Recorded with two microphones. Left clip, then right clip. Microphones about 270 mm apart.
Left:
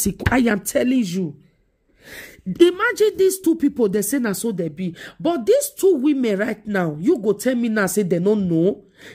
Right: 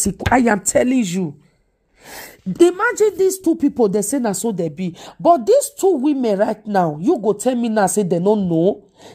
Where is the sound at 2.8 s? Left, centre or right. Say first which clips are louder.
Right 1 dB; centre.